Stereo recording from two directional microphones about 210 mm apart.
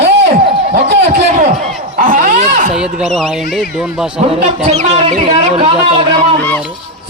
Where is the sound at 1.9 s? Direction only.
40° right (ahead or behind).